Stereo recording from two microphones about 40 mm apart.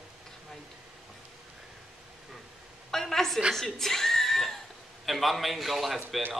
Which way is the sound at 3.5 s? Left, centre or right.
Centre.